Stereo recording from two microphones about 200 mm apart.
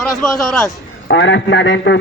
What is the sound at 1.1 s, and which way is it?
Speech, 70° left (ahead or behind).